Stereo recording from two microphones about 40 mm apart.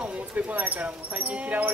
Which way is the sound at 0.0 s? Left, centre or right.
Right.